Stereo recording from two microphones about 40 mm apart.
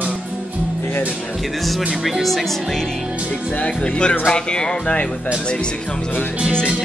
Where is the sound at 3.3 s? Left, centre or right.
Left.